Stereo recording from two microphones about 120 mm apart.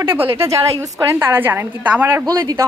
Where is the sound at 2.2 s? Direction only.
35° right (ahead or behind).